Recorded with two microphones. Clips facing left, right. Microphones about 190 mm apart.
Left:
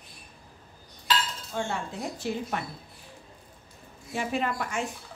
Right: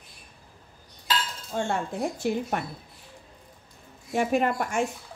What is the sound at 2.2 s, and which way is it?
Speech, 50° right (ahead or behind).